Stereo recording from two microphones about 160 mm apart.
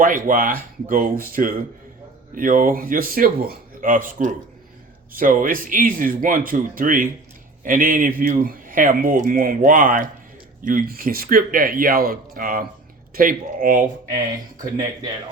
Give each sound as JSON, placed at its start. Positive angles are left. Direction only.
{"t": 0.0, "sound": "speech", "side_deg": -55}